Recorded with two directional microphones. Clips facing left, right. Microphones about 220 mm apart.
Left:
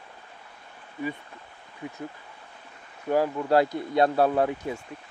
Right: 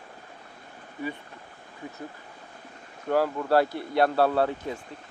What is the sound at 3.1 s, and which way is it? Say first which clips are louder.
Speech: left 1 dB; 15° left (ahead or behind).